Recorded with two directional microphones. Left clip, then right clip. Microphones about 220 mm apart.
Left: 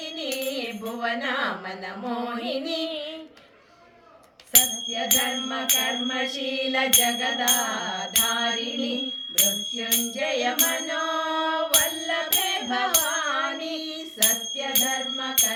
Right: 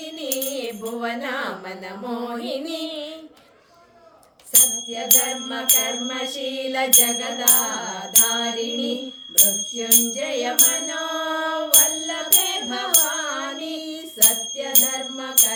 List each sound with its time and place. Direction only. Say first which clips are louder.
0.2 s music: right 2 dB; 60° right (ahead or behind)
4.9 s music: right 1 dB; 60° right (ahead or behind)